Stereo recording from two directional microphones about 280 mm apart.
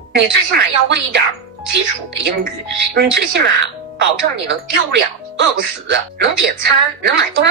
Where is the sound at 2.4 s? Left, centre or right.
Right.